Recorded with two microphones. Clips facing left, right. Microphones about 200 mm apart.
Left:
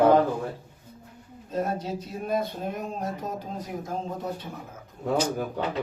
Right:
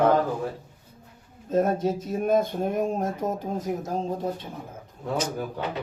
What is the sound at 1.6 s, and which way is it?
Speech, 50° right (ahead or behind).